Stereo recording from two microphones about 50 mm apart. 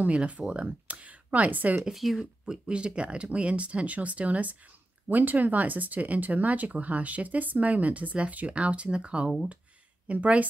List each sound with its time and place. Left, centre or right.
0.0 s speech: right
1.8 s speech: centre
2.4 s speech: centre